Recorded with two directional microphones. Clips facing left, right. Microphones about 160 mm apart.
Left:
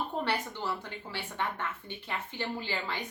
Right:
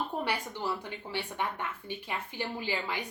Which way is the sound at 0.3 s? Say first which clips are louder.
Even; 15° right (ahead or behind).